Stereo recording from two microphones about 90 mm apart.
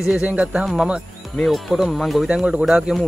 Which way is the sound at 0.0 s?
10° right (ahead or behind).